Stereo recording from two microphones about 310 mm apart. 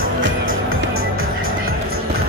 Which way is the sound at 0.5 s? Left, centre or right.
Right.